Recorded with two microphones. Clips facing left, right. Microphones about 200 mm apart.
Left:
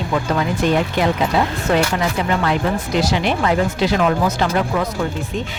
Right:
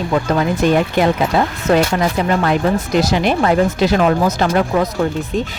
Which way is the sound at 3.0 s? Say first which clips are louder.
Right 2 dB; 45° right (ahead or behind).